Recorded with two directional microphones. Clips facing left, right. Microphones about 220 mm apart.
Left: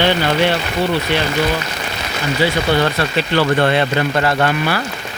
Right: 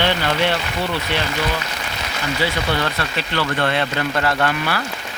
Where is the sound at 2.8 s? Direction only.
25° left (ahead or behind).